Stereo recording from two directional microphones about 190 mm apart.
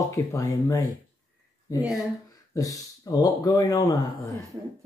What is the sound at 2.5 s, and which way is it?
Speech, 15° left (ahead or behind).